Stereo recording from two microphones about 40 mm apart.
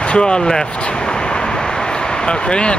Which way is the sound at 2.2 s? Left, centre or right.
Left.